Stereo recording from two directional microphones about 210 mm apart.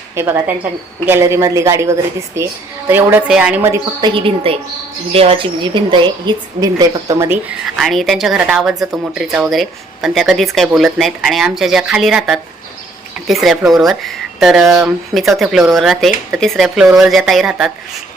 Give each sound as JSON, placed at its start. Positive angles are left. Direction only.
{"t": 0.2, "sound": "a woman's voice", "side_deg": -10}
{"t": 4.5, "sound": "a woman's voice", "side_deg": -25}
{"t": 7.8, "sound": "a woman's voice", "side_deg": 0}